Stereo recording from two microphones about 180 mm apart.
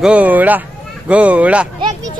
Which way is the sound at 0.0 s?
10° right (ahead or behind).